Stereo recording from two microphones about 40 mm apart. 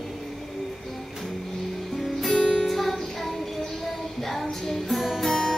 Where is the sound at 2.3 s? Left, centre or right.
Left.